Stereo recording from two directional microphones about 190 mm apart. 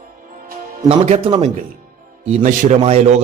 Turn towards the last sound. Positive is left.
turn(degrees=-35)  # may be behind; listen again after turning